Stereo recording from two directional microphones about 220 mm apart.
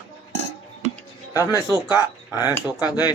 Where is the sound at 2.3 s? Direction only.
15° left (ahead or behind).